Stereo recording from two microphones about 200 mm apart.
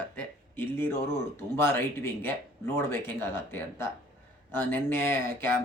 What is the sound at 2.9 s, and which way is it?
Speech, 10° left (ahead or behind).